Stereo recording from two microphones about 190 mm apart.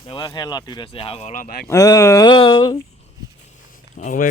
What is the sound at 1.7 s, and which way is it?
Speech, 15° left (ahead or behind).